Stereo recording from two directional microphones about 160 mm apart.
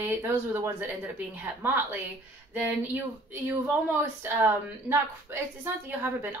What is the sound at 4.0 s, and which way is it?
A woman's voice, 15° right (ahead or behind).